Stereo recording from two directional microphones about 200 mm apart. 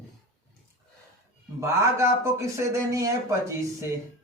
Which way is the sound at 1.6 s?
15° right (ahead or behind).